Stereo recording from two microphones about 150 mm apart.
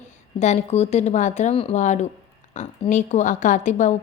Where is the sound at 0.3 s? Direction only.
50° left (ahead or behind).